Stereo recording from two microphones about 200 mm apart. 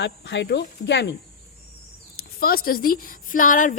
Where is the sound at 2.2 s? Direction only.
50° left (ahead or behind).